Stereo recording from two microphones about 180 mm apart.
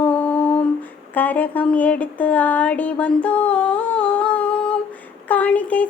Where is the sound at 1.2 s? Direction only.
10° left (ahead or behind).